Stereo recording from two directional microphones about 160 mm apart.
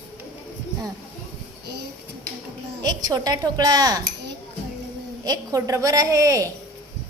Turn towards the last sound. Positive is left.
turn(degrees=-20)  # may be behind; listen again after turning